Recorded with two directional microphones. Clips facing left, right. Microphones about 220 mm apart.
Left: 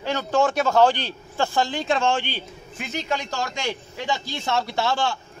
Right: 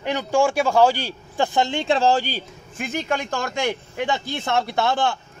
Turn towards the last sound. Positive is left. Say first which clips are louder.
# right 2 dB
turn(degrees=-55)  # may be behind; listen again after turning